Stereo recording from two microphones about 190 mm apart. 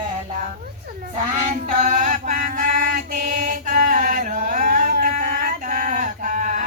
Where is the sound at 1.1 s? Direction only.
40° right (ahead or behind).